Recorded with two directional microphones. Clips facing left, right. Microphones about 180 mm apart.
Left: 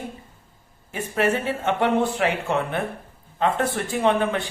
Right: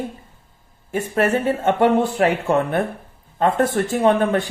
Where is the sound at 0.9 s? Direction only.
45° right (ahead or behind).